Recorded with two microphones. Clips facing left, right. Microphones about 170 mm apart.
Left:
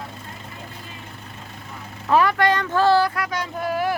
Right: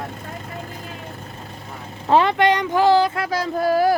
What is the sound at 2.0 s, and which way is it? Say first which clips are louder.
Speech: right 2 dB; 25° right (ahead or behind).